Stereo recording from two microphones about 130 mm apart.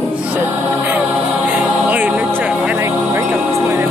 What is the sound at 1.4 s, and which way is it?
Choir, 15° right (ahead or behind).